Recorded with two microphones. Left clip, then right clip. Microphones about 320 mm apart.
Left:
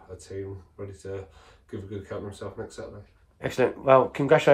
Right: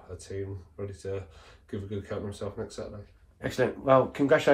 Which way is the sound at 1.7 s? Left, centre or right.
Centre.